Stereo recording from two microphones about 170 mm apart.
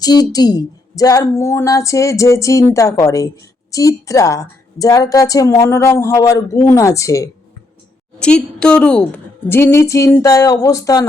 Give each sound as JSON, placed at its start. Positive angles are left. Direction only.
{"t": 0.0, "sound": "a woman's voice", "side_deg": 25}
{"t": 8.2, "sound": "a woman's voice", "side_deg": 5}